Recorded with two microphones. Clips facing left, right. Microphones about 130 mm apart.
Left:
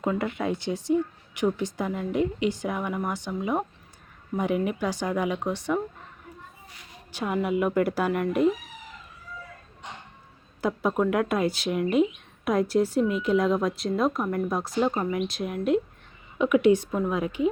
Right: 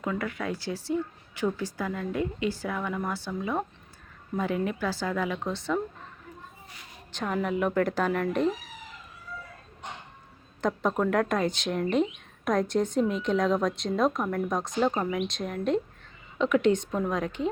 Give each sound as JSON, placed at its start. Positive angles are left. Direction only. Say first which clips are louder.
{"t": 0.0, "sound": "speech", "louder": "left 4 dB", "side_deg": 25}
{"t": 7.1, "sound": "speech", "louder": "left 2 dB", "side_deg": 10}
{"t": 10.6, "sound": "a woman's voice", "louder": "left 2 dB", "side_deg": 5}